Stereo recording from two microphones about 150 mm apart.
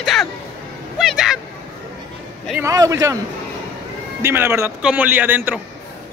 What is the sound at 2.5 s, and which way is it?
Speech, 20° right (ahead or behind).